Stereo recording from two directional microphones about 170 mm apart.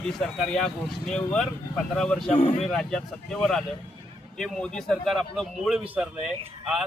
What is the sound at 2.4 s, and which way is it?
Speech, 40° left (ahead or behind).